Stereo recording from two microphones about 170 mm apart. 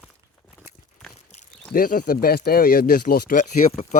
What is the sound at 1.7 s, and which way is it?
Speech, 55° left (ahead or behind).